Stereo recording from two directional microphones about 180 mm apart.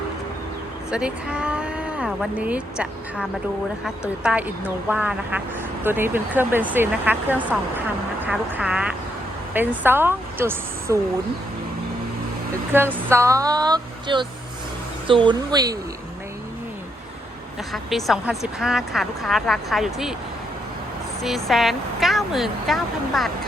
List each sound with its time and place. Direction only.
0.9 s speech: 5° right (ahead or behind)
12.7 s speech: 10° right (ahead or behind)
17.7 s speech: centre (ahead or behind)
21.2 s speech: centre (ahead or behind)